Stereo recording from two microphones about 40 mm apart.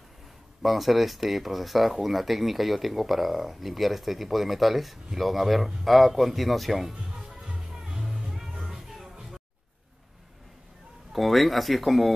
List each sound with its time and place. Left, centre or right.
0.6 s speech: centre
6.9 s music: centre
11.1 s speech: centre